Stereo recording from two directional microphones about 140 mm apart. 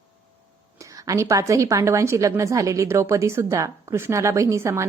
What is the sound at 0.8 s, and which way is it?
A woman's voice, 25° right (ahead or behind).